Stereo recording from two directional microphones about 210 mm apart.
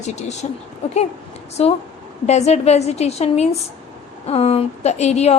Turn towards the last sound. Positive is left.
turn(degrees=30)  # may be behind; listen again after turning